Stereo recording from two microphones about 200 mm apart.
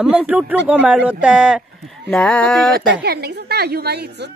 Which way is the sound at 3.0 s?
55° right (ahead or behind).